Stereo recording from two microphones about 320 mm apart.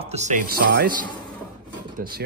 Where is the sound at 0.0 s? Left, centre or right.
Right.